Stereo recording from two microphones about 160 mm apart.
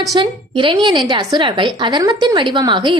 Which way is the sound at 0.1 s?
30° right (ahead or behind).